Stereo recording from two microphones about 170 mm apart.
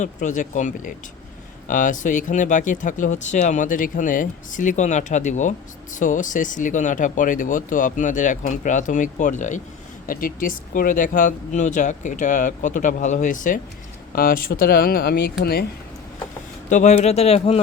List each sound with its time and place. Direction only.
0.0 s speech: 45° left (ahead or behind)
10.1 s speech: 55° left (ahead or behind)
16.6 s a man's voice: 45° left (ahead or behind)